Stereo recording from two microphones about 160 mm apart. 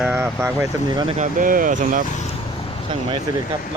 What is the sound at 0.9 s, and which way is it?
Speech, 30° right (ahead or behind).